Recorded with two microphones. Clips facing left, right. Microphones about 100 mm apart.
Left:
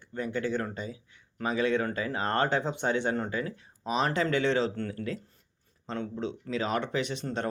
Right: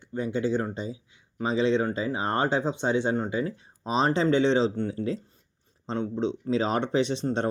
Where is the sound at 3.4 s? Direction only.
30° right (ahead or behind).